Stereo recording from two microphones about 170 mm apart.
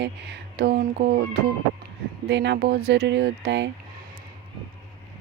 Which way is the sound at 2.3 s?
90° right.